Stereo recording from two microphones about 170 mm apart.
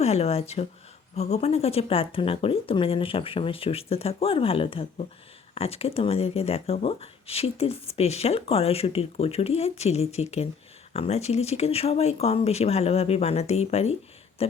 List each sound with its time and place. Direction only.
0.0 s speech: 40° left (ahead or behind)